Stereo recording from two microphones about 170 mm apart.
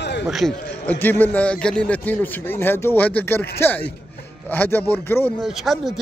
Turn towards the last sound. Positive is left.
turn(degrees=0)  # may be behind; listen again after turning